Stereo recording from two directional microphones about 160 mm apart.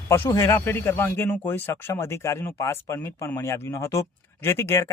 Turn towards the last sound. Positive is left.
turn(degrees=15)  # may be behind; listen again after turning